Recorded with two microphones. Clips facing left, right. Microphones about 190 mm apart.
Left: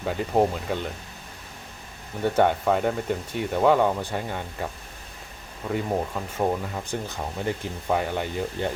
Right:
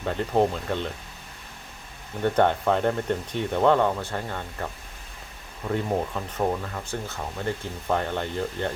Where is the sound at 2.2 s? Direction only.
5° left (ahead or behind).